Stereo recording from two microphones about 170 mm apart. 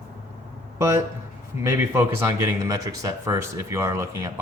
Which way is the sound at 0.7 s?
15° right (ahead or behind).